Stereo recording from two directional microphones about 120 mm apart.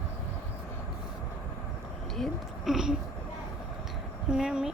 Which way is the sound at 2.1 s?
Centre (ahead or behind).